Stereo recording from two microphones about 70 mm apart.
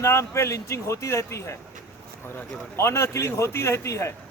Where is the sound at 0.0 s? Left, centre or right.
Left.